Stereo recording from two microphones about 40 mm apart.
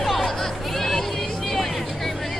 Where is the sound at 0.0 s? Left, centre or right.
Centre.